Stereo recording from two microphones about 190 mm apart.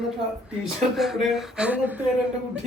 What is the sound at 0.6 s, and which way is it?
Speech, centre (ahead or behind).